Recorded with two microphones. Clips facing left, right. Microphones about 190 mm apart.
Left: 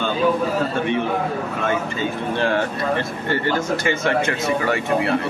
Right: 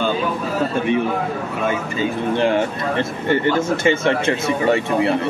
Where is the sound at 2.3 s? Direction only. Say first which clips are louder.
Right 3 dB; 20° right (ahead or behind).